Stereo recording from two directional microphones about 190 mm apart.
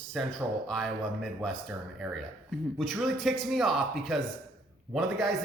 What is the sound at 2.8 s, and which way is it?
A man's voice, centre (ahead or behind).